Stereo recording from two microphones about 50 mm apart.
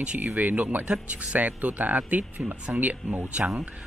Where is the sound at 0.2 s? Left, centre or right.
Right.